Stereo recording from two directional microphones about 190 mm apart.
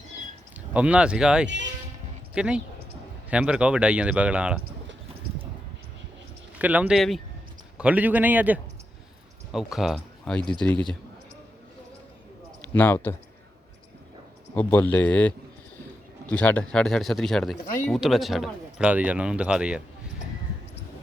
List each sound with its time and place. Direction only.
0.7 s speech: 5° right (ahead or behind)
1.5 s speech: 70° right (ahead or behind)
2.3 s speech: 5° right (ahead or behind)
6.6 s speech: 10° right (ahead or behind)
12.7 s speech: 10° left (ahead or behind)
14.5 s speech: 10° left (ahead or behind)
16.3 s speech: 5° left (ahead or behind)